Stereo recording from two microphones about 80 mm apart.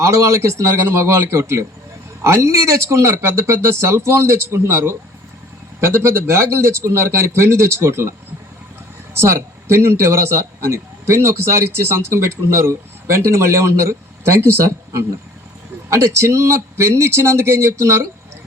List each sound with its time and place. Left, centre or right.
0.0 s a man's voice: right
9.1 s a man's voice: right